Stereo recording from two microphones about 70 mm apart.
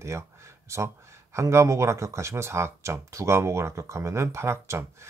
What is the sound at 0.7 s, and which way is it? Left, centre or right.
Speech, right.